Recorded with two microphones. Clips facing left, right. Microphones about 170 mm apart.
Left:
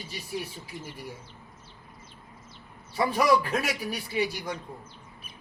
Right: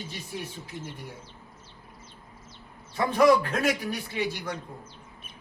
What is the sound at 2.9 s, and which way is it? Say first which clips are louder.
A man's voice: right 3 dB; 10° left (ahead or behind).